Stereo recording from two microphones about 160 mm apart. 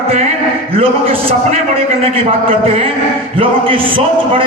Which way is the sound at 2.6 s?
35° right (ahead or behind).